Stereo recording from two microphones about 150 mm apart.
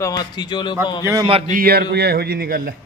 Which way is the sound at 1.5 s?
80° right.